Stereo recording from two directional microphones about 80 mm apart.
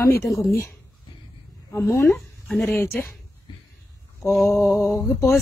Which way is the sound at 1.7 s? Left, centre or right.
Left.